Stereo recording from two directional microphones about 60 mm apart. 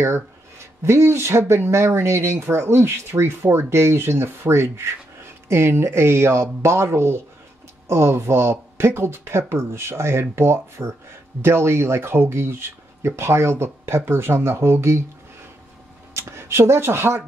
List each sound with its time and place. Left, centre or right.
0.8 s speech: right
16.1 s speech: right